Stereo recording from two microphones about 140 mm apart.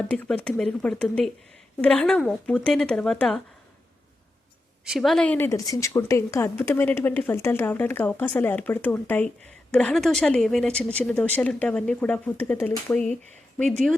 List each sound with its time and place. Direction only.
0.1 s speech: 10° left (ahead or behind)
4.9 s speech: centre (ahead or behind)
5.5 s speech: 25° left (ahead or behind); by 13.1 s 10° left (ahead or behind)